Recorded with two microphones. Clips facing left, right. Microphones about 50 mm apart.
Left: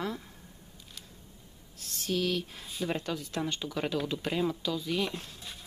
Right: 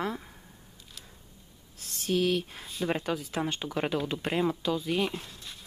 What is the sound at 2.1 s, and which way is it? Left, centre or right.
Speech, centre.